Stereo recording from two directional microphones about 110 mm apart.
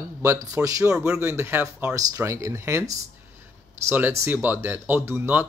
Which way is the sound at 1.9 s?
30° right (ahead or behind).